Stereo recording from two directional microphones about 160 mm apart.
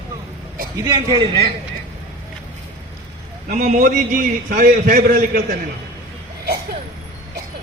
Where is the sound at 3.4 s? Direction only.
55° right (ahead or behind).